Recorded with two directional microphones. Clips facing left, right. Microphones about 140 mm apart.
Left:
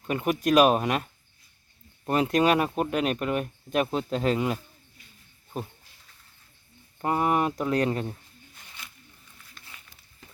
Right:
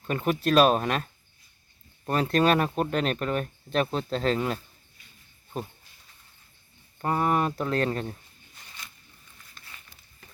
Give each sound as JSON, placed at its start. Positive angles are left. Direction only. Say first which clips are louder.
{"t": 0.1, "sound": "speech", "louder": "left 1 dB", "side_deg": 15}
{"t": 7.0, "sound": "speech", "louder": "left 1 dB", "side_deg": 15}